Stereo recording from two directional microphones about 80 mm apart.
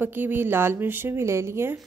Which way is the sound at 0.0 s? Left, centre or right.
Right.